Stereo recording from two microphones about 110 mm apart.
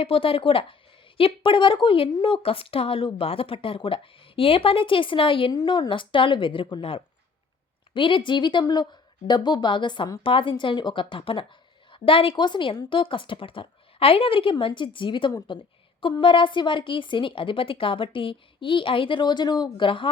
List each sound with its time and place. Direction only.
0.0 s a woman's voice: 60° left (ahead or behind)
5.5 s a woman's voice: 40° left (ahead or behind)